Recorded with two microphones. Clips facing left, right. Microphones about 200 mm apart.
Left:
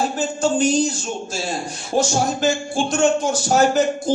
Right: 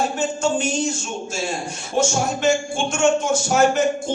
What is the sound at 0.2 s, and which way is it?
A man's voice, 35° left (ahead or behind).